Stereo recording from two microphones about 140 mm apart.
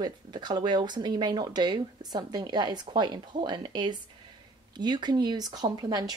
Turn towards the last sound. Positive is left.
turn(degrees=-30)  # may be behind; listen again after turning